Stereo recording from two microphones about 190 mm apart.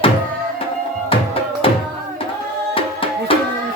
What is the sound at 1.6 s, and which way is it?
Music, 30° left (ahead or behind).